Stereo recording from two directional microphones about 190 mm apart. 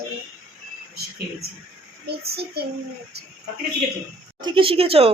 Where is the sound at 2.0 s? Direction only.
55° right (ahead or behind).